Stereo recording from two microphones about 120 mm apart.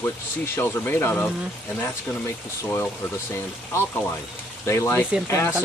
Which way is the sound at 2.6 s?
20° left (ahead or behind).